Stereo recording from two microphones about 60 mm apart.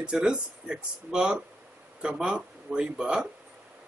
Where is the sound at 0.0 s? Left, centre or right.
Centre.